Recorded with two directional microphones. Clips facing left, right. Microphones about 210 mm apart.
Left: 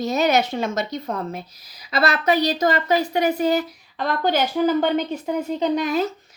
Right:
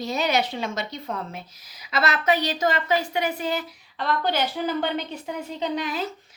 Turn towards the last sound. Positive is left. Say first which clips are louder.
# left 7 dB
turn(degrees=45)  # may be behind; listen again after turning